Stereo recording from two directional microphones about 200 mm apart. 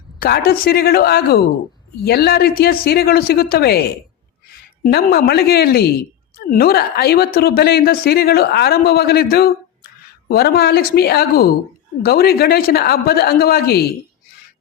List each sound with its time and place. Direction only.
0.2 s a woman's voice: 50° left (ahead or behind)